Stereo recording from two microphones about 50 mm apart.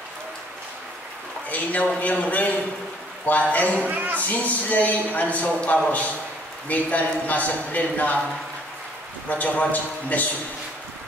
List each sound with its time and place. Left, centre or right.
1.5 s a man's voice: left
3.8 s speech: right
4.2 s a man's voice: left
9.3 s a man's voice: left